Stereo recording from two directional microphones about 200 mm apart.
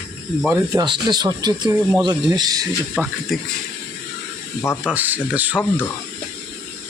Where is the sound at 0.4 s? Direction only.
15° right (ahead or behind).